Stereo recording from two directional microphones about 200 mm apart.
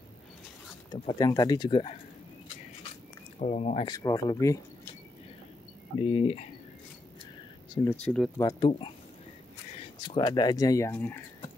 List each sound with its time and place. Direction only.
0.9 s speech: 20° left (ahead or behind)
3.3 s speech: 35° left (ahead or behind)
3.9 s speech: 20° left (ahead or behind)
5.9 s speech: 30° left (ahead or behind)
7.9 s speech: 5° left (ahead or behind)
8.4 s speech: 20° left (ahead or behind)
10.0 s speech: 25° left (ahead or behind)